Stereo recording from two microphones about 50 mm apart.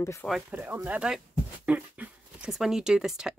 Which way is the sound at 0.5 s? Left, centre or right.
Right.